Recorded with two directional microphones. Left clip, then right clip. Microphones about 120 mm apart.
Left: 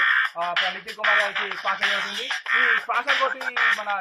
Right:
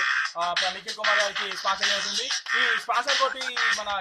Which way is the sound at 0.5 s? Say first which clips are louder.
Left 2 dB; 45° left (ahead or behind).